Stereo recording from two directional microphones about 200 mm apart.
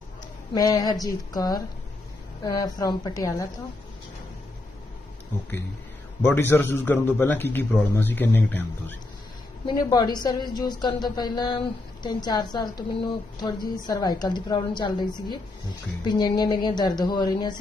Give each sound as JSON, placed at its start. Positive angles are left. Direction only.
{"t": 0.5, "sound": "a woman's voice", "side_deg": 20}
{"t": 6.2, "sound": "a man's voice", "side_deg": 10}
{"t": 9.9, "sound": "a woman's voice", "side_deg": 20}